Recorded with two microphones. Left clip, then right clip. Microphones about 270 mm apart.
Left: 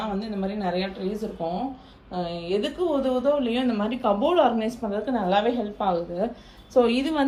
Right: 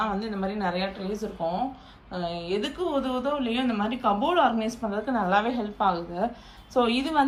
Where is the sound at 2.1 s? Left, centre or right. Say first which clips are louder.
Left 2 dB; centre.